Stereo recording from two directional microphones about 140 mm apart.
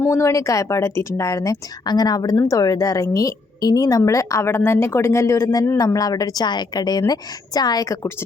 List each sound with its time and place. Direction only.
0.0 s a woman's voice: 20° left (ahead or behind)